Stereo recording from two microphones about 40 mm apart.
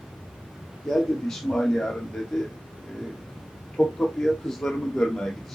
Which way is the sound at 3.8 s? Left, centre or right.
Left.